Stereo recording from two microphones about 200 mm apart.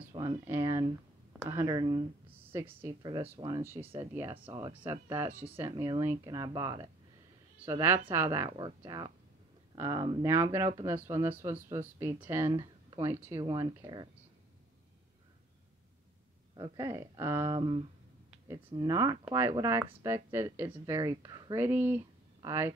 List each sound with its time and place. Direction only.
0.1 s a sound: 25° right (ahead or behind)
0.5 s speech: 15° right (ahead or behind)
2.3 s a sound: 10° right (ahead or behind)
3.0 s speech: 25° right (ahead or behind)
4.5 s speech: 20° right (ahead or behind)
8.5 s speech: 25° right (ahead or behind)
16.5 s speech: 20° right (ahead or behind)
17.5 s speech: 25° right (ahead or behind)